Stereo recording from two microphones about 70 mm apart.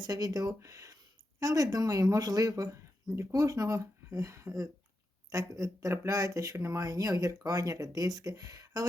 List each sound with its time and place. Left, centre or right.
0.0 s speech: right